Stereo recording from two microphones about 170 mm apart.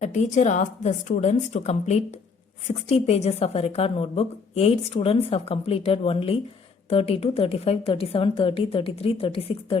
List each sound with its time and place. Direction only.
0.0 s a woman's voice: 45° left (ahead or behind)